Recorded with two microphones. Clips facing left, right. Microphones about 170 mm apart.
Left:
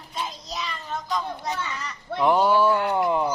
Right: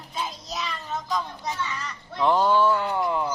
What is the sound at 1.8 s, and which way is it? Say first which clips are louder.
Speech: left 2 dB; 5° left (ahead or behind).